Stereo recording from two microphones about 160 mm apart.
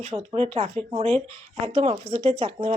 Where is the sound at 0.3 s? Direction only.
40° right (ahead or behind).